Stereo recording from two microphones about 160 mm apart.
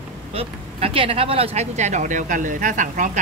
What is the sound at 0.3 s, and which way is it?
Speech, 35° right (ahead or behind).